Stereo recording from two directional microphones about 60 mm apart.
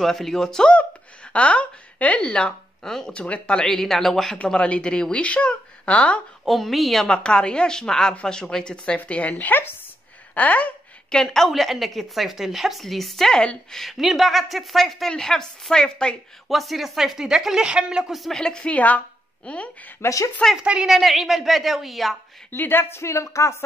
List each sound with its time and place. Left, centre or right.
0.0 s speech: centre
4.5 s speech: centre
6.4 s a woman's voice: centre
7.1 s speech: centre
11.1 s a woman's voice: centre
16.4 s a woman's voice: centre
18.3 s speech: centre
20.0 s speech: left
20.5 s a woman's voice: centre
20.9 s a woman's voice: centre
22.5 s speech: left